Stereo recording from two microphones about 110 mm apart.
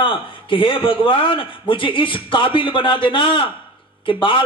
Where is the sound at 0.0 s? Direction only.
50° left (ahead or behind).